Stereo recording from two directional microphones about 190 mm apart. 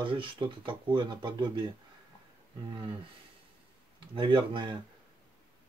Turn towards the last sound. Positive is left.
turn(degrees=-25)  # may be behind; listen again after turning